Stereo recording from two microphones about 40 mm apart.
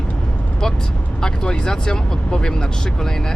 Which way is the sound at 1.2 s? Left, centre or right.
Centre.